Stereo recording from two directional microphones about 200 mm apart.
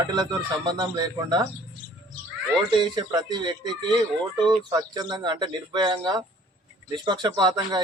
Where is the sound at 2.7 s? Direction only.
20° right (ahead or behind).